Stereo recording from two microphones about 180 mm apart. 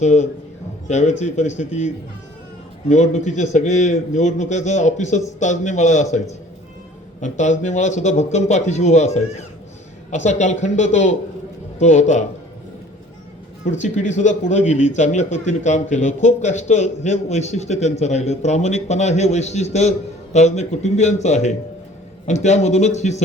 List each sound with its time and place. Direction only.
0.0 s a man's voice: 40° left (ahead or behind)
2.9 s a man's voice: 40° left (ahead or behind)
13.7 s a man's voice: 40° left (ahead or behind)